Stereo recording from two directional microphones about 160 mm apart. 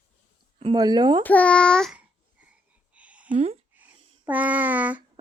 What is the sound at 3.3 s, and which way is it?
Speech, 40° right (ahead or behind).